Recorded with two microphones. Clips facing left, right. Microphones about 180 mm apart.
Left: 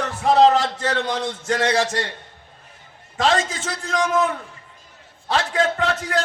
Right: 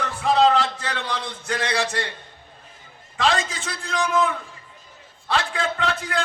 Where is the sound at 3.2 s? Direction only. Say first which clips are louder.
Left 3 dB; 45° left (ahead or behind).